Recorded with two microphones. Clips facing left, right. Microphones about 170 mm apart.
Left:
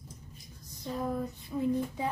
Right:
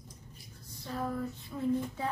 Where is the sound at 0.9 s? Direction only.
15° left (ahead or behind).